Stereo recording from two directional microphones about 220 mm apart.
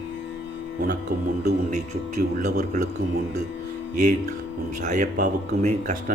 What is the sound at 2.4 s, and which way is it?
Speech, 35° right (ahead or behind).